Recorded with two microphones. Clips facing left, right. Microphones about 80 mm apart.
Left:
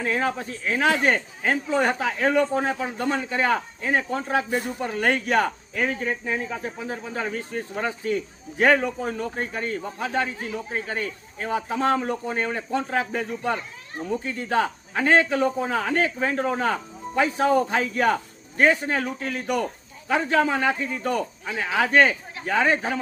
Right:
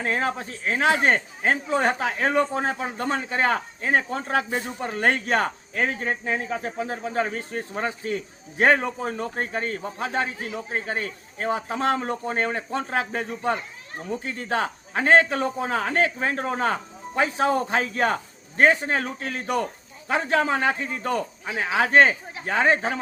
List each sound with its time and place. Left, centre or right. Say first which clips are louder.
0.2 s speech: left 1 dB; right
6.2 s speech: right 1 dB; right
20.1 s speech: left 1 dB; right
21.4 s speech: right 1 dB; centre